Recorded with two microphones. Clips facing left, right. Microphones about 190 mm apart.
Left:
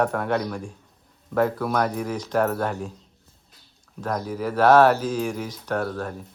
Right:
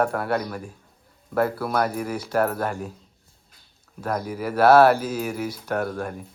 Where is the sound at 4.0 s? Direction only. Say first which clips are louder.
Even; 10° right (ahead or behind).